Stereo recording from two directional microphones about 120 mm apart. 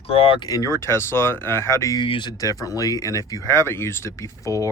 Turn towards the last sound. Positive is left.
turn(degrees=25)  # may be behind; listen again after turning